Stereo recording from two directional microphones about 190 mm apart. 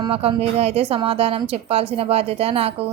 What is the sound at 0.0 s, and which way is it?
Speech, 30° right (ahead or behind).